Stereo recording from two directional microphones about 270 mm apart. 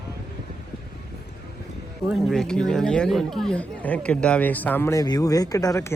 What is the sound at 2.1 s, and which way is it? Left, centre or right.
Speech, centre.